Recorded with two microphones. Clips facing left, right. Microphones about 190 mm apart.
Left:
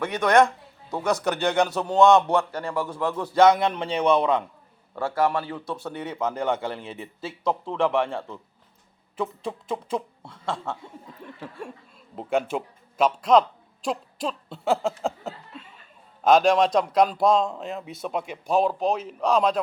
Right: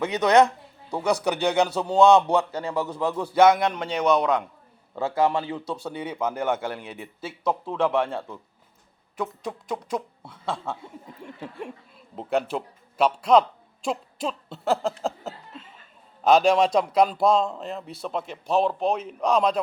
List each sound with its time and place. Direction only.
0.0 s a man's voice: 10° right (ahead or behind)
4.9 s a man's voice: 20° right (ahead or behind)
11.2 s a man's voice: 15° right (ahead or behind)
12.1 s a man's voice: centre (ahead or behind)